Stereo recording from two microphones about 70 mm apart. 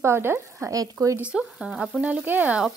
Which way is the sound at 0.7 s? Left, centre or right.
Right.